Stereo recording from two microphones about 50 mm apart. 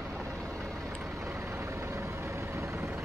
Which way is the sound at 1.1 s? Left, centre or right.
Right.